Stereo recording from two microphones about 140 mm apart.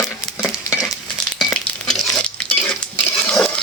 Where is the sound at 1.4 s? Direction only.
Centre (ahead or behind).